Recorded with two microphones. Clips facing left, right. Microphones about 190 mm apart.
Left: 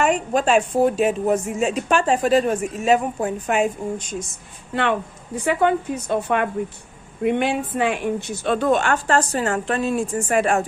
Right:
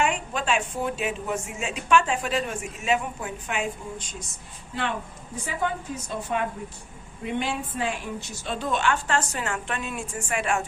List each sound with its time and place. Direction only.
0.0 s a woman's voice: 40° left (ahead or behind)
4.7 s a woman's voice: 65° left (ahead or behind); by 10.7 s 40° left (ahead or behind)